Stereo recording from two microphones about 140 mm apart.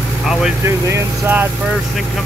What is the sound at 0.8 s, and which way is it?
Speech, 20° right (ahead or behind).